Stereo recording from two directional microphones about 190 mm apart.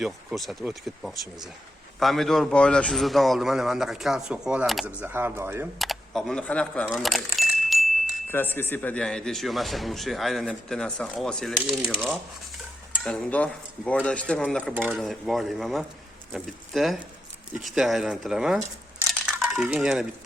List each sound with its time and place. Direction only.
0.0 s speech: centre (ahead or behind)
5.8 s speech: centre (ahead or behind)
6.8 s keys jangling: centre (ahead or behind)
8.3 s speech: 10° left (ahead or behind)